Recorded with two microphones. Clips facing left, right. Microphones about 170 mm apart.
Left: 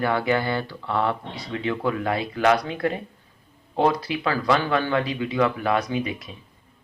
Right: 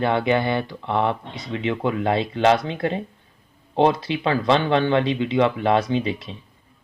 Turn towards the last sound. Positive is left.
turn(degrees=-30)  # may be behind; listen again after turning